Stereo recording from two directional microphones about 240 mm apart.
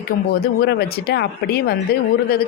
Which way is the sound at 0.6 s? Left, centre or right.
Left.